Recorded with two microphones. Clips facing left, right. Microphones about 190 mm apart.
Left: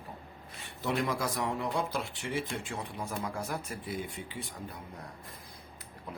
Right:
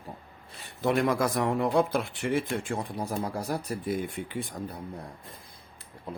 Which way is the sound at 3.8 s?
55° right (ahead or behind).